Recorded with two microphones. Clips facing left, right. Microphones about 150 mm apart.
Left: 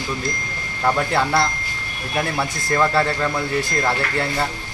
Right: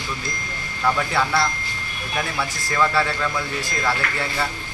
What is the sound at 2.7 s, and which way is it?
Speech, 45° left (ahead or behind).